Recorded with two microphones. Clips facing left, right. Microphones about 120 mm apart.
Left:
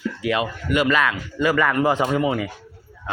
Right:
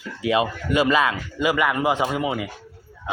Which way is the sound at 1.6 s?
10° right (ahead or behind).